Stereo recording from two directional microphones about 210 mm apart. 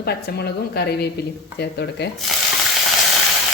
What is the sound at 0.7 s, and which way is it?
Frying, 50° left (ahead or behind).